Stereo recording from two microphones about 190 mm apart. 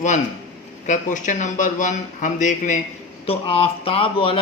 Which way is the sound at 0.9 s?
40° left (ahead or behind).